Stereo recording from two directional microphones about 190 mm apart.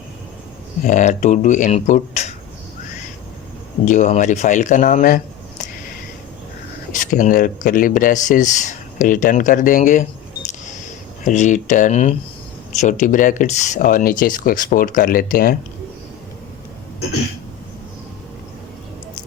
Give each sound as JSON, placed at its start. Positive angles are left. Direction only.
{"t": 0.9, "sound": "speech", "side_deg": 40}
{"t": 3.8, "sound": "speech", "side_deg": 40}
{"t": 6.9, "sound": "speech", "side_deg": 40}
{"t": 11.2, "sound": "speech", "side_deg": 40}